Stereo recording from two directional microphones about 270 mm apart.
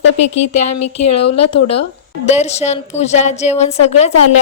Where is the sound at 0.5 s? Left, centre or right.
Left.